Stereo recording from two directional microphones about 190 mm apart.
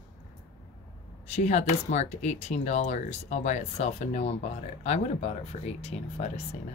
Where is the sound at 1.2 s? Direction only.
35° left (ahead or behind).